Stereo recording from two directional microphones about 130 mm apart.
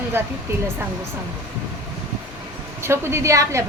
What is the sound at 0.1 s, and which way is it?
Speech, 15° right (ahead or behind).